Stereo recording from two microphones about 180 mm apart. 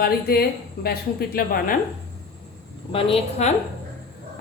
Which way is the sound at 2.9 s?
30° left (ahead or behind).